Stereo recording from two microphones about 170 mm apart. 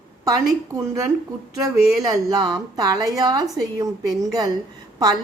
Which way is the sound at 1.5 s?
20° right (ahead or behind).